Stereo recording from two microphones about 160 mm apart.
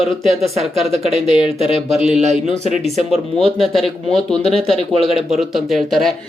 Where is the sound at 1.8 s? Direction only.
45° right (ahead or behind).